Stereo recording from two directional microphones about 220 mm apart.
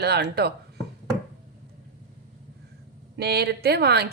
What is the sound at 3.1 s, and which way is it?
Speech, 45° right (ahead or behind).